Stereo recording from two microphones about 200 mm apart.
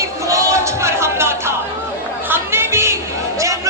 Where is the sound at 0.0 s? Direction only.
15° right (ahead or behind).